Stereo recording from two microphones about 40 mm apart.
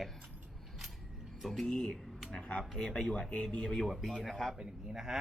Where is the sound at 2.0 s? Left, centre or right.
Centre.